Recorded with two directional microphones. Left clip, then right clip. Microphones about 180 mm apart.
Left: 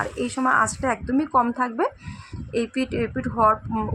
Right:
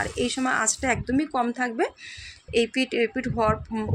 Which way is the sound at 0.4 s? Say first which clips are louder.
Left 7 dB; 15° right (ahead or behind).